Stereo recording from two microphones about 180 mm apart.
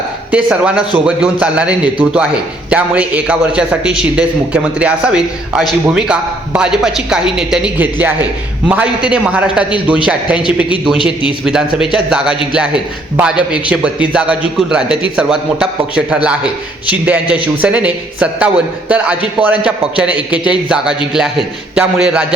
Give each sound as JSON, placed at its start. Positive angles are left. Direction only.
{"t": 0.3, "sound": "a man's voice", "side_deg": -5}
{"t": 10.9, "sound": "a man's voice", "side_deg": 30}
{"t": 11.4, "sound": "a man's voice", "side_deg": -5}